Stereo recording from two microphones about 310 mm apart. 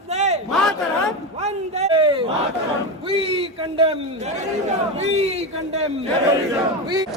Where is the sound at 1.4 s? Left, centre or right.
Centre.